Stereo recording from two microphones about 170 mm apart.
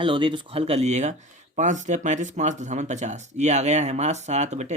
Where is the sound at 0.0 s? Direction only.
30° right (ahead or behind).